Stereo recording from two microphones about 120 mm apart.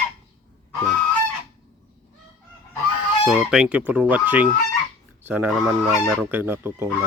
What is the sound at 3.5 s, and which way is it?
Speech, 10° right (ahead or behind).